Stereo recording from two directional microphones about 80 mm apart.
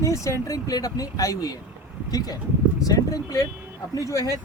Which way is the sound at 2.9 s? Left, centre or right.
Left.